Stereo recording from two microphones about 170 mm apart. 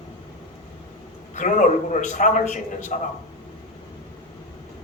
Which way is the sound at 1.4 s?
50° left (ahead or behind).